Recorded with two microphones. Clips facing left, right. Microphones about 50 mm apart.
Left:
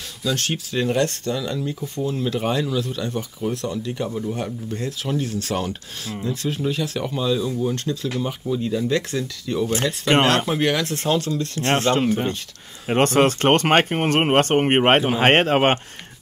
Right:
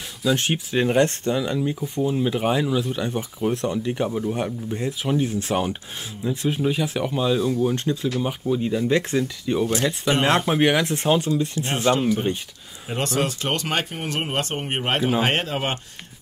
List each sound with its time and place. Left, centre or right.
0.2 s speech: centre
11.9 s speech: left